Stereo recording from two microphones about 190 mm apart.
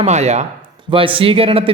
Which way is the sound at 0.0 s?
35° right (ahead or behind).